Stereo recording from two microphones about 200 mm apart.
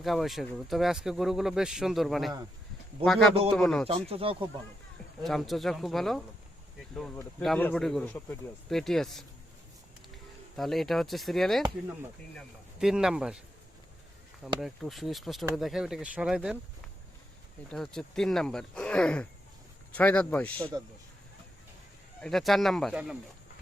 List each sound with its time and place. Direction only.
0.0 s speech: centre (ahead or behind)
3.8 s speech: 30° right (ahead or behind)
5.2 s speech: centre (ahead or behind)
10.6 s speech: centre (ahead or behind)
12.8 s speech: 5° right (ahead or behind)
14.6 s speech: centre (ahead or behind)
17.7 s speech: 5° left (ahead or behind)
22.2 s speech: centre (ahead or behind)